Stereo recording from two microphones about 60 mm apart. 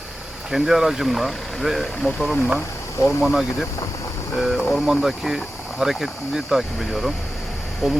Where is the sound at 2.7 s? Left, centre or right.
Left.